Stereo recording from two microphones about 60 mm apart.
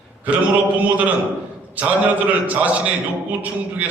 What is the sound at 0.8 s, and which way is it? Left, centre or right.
A man's voice, right.